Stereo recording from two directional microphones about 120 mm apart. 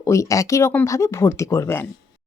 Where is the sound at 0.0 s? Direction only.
25° left (ahead or behind).